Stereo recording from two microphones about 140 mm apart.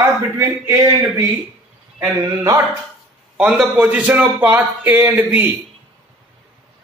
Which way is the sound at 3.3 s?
5° right (ahead or behind).